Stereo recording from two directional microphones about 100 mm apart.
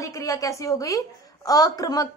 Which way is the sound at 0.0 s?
35° left (ahead or behind).